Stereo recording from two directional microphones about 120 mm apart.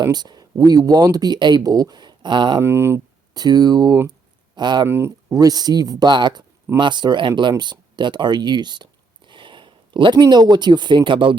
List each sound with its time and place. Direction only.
0.0 s speech: 35° right (ahead or behind)
2.6 s speech: 20° right (ahead or behind)
3.3 s speech: 35° right (ahead or behind)
4.9 s speech: 20° right (ahead or behind); by 11.3 s 45° right (ahead or behind)